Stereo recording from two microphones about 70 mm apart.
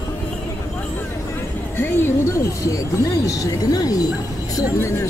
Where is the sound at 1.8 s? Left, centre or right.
Left.